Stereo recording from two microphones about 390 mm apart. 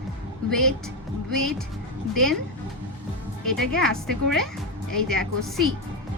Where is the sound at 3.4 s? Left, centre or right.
Centre.